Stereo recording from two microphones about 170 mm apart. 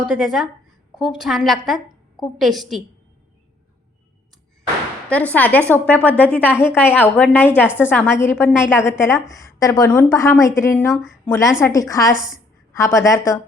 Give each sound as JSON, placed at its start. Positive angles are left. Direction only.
{"t": 0.0, "sound": "a woman's voice", "side_deg": -5}
{"t": 5.0, "sound": "a woman's voice", "side_deg": 10}
{"t": 10.9, "sound": "a woman's voice", "side_deg": 0}
{"t": 11.3, "sound": "a woman's voice", "side_deg": 15}